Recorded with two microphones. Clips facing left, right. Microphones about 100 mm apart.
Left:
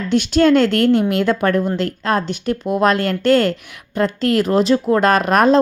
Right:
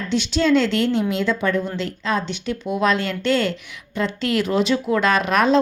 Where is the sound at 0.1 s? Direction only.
50° left (ahead or behind).